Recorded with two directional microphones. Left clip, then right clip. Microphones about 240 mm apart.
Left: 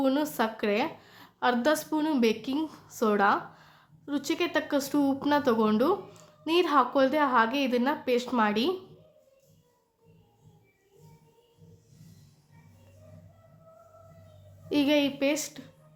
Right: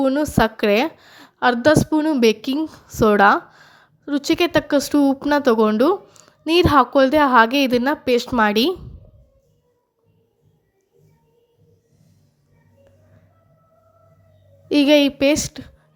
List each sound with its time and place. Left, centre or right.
0.0 s a woman's voice: right
14.7 s a woman's voice: right